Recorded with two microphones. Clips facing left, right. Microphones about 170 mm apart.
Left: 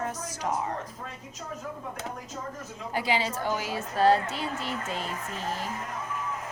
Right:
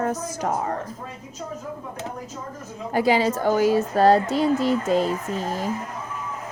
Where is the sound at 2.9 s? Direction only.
45° right (ahead or behind).